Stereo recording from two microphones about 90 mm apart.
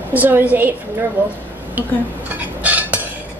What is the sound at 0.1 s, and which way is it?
A woman's voice, 20° right (ahead or behind).